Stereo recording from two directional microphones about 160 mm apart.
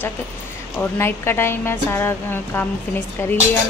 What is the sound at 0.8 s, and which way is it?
A woman's voice, 15° left (ahead or behind).